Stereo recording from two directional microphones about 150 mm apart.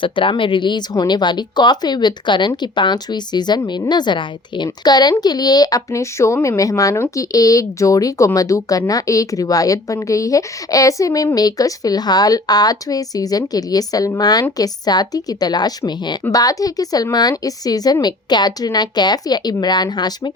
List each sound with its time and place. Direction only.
0.0 s speech: 35° left (ahead or behind)